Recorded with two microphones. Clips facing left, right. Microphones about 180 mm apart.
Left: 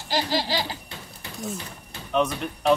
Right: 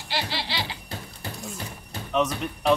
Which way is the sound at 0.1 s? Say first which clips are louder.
Left 6 dB; 40° left (ahead or behind).